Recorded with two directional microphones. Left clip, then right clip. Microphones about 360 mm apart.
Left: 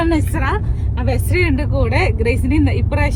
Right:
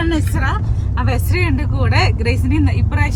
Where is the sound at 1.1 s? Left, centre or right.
Left.